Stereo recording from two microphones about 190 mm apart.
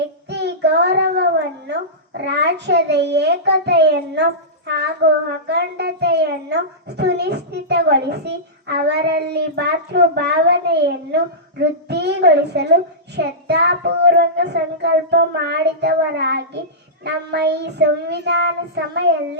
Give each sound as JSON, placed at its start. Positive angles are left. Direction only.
{"t": 0.3, "sound": "a child's voice", "side_deg": -65}